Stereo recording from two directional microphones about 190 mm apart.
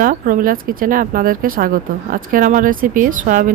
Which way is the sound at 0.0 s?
50° right (ahead or behind).